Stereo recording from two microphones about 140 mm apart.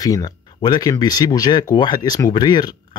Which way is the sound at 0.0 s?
25° left (ahead or behind).